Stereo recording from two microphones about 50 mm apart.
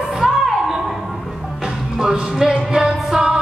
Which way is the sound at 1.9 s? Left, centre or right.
Centre.